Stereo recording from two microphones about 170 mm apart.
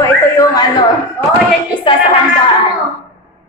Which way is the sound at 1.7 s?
25° left (ahead or behind).